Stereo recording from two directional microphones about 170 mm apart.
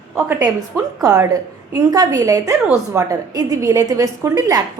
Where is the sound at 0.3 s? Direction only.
20° right (ahead or behind).